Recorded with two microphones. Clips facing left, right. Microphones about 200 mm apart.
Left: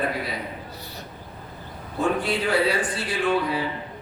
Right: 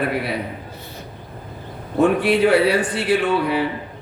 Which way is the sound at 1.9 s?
65° right (ahead or behind).